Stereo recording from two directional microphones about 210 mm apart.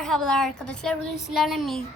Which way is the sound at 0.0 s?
5° left (ahead or behind).